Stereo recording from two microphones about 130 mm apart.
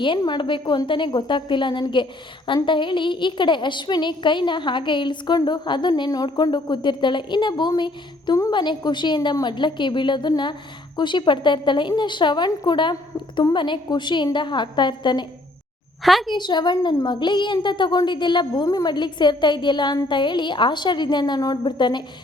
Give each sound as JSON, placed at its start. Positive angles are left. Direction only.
{"t": 0.0, "sound": "a woman's voice", "side_deg": 35}
{"t": 16.0, "sound": "a woman's voice", "side_deg": 0}
{"t": 16.3, "sound": "a woman's voice", "side_deg": 35}